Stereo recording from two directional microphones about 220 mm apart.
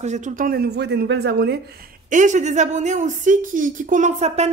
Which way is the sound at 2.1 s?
35° right (ahead or behind).